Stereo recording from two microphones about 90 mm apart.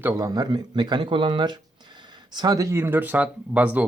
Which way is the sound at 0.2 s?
45° right (ahead or behind).